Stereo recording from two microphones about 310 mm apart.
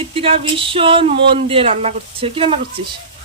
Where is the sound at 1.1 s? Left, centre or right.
Right.